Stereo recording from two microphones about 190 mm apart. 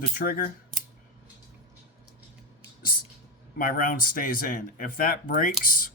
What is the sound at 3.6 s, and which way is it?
Speech, 50° left (ahead or behind).